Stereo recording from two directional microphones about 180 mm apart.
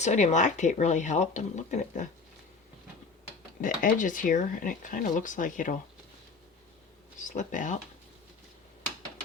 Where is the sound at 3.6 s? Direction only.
45° left (ahead or behind).